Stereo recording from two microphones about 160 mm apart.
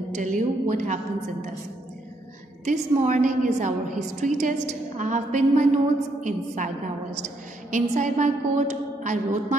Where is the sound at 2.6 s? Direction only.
45° right (ahead or behind).